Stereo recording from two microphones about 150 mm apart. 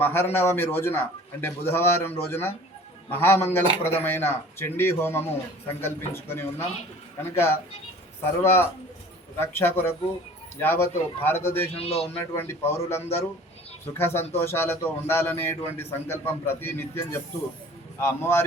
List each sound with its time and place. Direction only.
0.0 s a man's voice: 15° left (ahead or behind)
11.7 s speech: 40° left (ahead or behind)
12.1 s a man's voice: 15° left (ahead or behind)